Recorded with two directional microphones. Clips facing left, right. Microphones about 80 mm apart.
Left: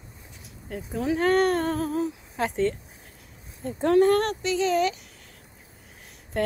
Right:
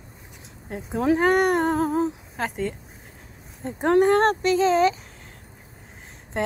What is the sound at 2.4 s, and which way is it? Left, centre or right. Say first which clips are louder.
Speech: left 4 dB; centre.